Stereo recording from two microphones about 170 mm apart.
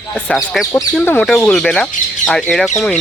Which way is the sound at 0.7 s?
10° left (ahead or behind).